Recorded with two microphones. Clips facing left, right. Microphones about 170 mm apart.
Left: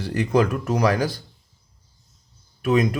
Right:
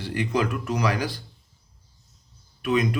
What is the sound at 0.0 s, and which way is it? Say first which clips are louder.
Speech: left 5 dB; 40° left (ahead or behind).